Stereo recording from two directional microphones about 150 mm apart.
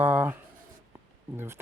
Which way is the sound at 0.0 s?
10° right (ahead or behind).